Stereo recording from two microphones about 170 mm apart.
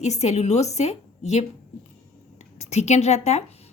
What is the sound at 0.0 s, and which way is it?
A woman's voice, 40° left (ahead or behind).